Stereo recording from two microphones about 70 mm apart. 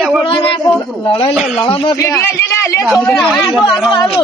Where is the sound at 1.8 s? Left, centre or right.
Left.